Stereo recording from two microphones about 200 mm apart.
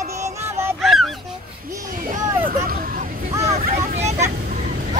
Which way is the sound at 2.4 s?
45° right (ahead or behind).